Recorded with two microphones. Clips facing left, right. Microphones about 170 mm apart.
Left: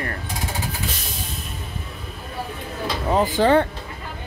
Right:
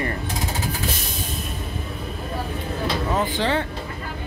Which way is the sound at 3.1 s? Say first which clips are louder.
Left 8 dB; 40° left (ahead or behind).